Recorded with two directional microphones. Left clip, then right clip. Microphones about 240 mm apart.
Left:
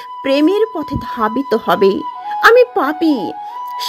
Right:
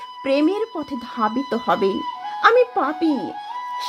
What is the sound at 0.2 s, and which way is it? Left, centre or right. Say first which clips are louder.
A woman's voice: left 6 dB; left.